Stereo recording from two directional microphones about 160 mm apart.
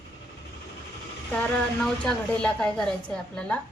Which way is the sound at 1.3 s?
5° left (ahead or behind).